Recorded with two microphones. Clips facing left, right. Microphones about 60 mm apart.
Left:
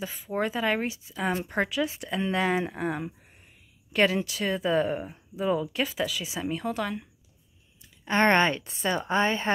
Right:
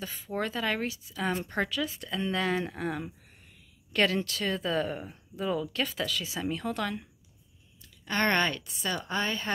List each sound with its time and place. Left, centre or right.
0.0 s speech: centre
1.1 s speech: centre
8.0 s a woman's voice: left